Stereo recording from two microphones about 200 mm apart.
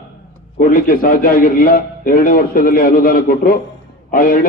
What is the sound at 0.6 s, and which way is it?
A man's voice, 45° left (ahead or behind).